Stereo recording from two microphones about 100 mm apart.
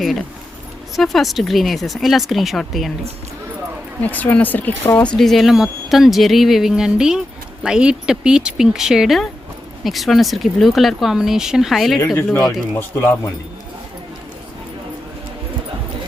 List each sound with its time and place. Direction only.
0.0 s speech: centre (ahead or behind)
4.0 s speech: 15° left (ahead or behind)
5.0 s speech: 5° left (ahead or behind)
12.5 s speech: 25° left (ahead or behind)